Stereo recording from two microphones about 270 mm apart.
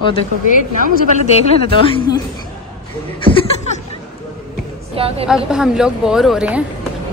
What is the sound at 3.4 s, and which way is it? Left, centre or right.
Chuckle, left.